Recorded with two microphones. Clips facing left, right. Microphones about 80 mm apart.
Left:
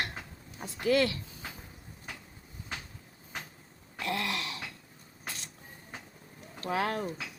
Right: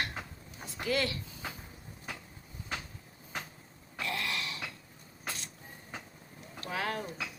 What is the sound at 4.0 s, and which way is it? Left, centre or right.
Dog, left.